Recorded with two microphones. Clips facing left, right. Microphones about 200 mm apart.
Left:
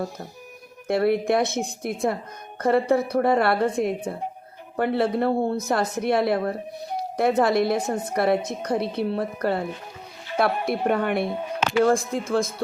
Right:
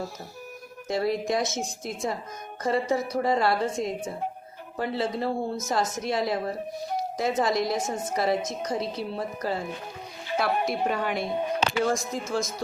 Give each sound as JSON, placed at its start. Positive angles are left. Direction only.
{"t": 0.9, "sound": "a woman's voice", "side_deg": 60}
{"t": 11.9, "sound": "speech", "side_deg": 30}
{"t": 12.3, "sound": "a woman's voice", "side_deg": 55}